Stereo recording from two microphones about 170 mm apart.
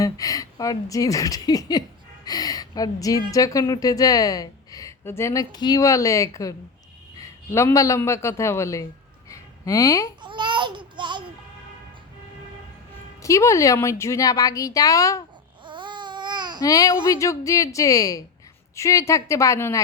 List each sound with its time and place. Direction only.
0.0 s a woman's voice: 20° left (ahead or behind)
9.3 s a sound: 20° left (ahead or behind)
10.2 s babbling: 25° right (ahead or behind)
13.2 s a woman's voice: 20° left (ahead or behind)
15.6 s babbling: 30° right (ahead or behind)
16.6 s a woman's voice: 20° left (ahead or behind)